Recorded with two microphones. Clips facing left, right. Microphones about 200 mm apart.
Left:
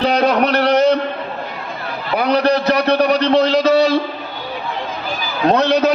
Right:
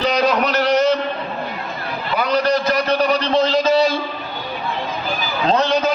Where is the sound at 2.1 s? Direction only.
60° left (ahead or behind).